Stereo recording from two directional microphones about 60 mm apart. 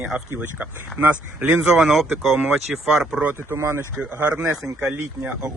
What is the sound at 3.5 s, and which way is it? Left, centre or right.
Speech, right.